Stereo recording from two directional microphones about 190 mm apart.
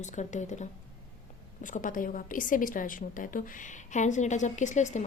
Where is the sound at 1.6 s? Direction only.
45° left (ahead or behind).